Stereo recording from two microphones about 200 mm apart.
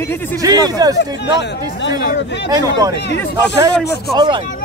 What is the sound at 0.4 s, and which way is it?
Speech, 20° right (ahead or behind).